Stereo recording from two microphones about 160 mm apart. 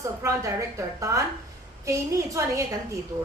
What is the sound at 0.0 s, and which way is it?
A woman's voice, 20° right (ahead or behind).